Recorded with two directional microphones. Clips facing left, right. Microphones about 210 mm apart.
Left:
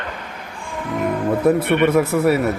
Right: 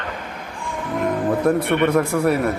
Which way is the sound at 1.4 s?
5° left (ahead or behind).